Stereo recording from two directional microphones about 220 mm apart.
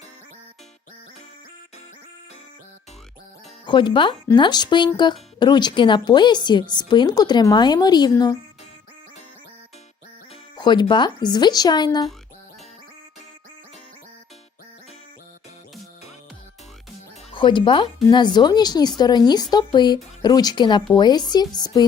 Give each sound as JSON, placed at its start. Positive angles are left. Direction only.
{"t": 3.7, "sound": "speech", "side_deg": 20}
{"t": 10.6, "sound": "speech", "side_deg": 20}
{"t": 17.3, "sound": "speech", "side_deg": 20}